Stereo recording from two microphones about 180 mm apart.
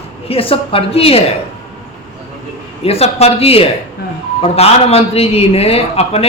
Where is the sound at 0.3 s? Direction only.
30° left (ahead or behind).